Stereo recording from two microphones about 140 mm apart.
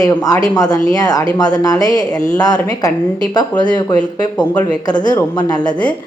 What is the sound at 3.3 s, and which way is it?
Speech, 30° left (ahead or behind).